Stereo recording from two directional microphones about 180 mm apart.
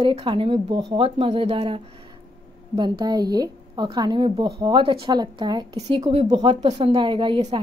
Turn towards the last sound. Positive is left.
turn(degrees=-25)  # may be behind; listen again after turning